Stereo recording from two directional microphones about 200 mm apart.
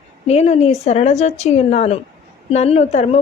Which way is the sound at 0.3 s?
30° left (ahead or behind).